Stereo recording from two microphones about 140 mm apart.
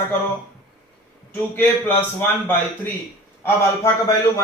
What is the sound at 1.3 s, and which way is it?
Speech, 10° left (ahead or behind).